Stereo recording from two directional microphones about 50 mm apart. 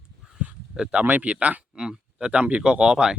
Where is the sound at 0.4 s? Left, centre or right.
Right.